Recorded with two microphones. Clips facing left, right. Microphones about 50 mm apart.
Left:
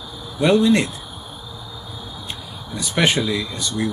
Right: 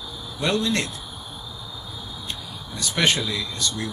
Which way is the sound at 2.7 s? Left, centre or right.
Centre.